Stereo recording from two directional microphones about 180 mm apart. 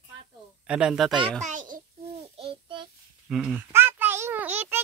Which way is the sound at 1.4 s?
45° right (ahead or behind).